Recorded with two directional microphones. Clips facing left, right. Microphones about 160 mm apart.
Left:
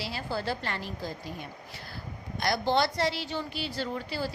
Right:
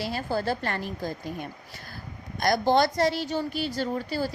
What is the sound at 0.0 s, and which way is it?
A woman's voice, 45° right (ahead or behind).